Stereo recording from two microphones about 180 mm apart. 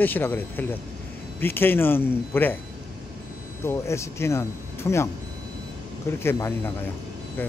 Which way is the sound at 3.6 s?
15° left (ahead or behind).